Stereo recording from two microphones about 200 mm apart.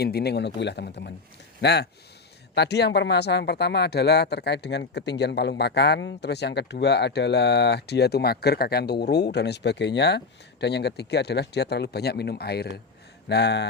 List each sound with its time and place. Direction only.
0.0 s speech: 55° left (ahead or behind)